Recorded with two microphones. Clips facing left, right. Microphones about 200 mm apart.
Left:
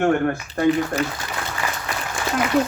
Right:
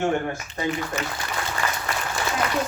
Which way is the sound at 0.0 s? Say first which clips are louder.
Left 5 dB; 60° left (ahead or behind).